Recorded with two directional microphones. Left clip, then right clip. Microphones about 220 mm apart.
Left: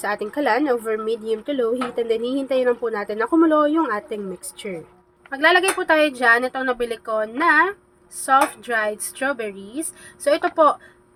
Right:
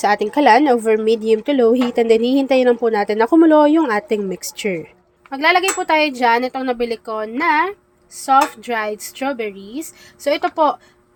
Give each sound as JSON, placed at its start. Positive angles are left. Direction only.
{"t": 0.0, "sound": "speech", "side_deg": -30}
{"t": 5.3, "sound": "a woman's voice", "side_deg": -15}